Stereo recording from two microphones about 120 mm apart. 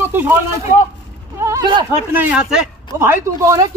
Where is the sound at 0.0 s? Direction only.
20° right (ahead or behind).